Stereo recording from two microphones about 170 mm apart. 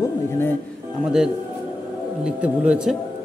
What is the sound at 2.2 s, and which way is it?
Speech, 5° right (ahead or behind).